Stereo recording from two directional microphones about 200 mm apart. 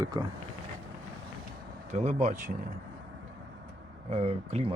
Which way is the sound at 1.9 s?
35° right (ahead or behind).